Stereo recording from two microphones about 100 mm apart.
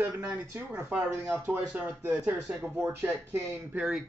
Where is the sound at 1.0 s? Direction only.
25° right (ahead or behind).